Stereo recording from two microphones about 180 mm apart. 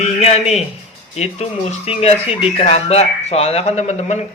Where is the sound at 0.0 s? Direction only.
35° left (ahead or behind).